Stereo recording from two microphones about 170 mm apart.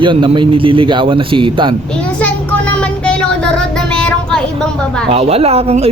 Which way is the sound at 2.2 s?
5° left (ahead or behind).